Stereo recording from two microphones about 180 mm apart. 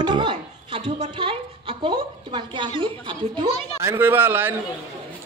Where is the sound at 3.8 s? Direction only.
10° right (ahead or behind).